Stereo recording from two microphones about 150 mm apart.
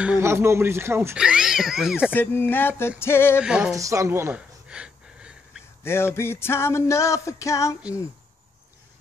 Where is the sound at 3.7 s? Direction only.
20° right (ahead or behind).